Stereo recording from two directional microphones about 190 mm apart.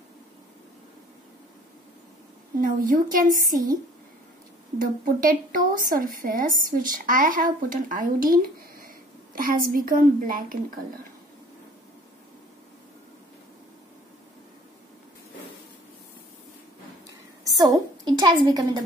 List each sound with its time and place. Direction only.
2.6 s a woman's voice: 45° right (ahead or behind)
5.0 s a woman's voice: 45° right (ahead or behind)
17.5 s a woman's voice: 20° right (ahead or behind)